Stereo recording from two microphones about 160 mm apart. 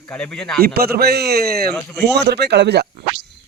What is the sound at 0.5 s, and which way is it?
A man's voice, 75° right (ahead or behind).